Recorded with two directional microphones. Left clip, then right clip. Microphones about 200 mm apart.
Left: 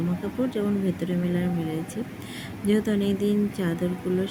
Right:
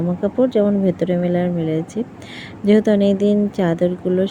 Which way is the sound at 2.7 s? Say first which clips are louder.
Right 10 dB; 25° right (ahead or behind).